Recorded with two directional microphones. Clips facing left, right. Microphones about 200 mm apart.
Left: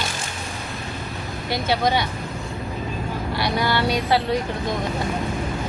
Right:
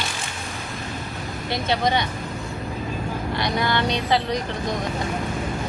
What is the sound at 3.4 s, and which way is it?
Speech, 5° left (ahead or behind).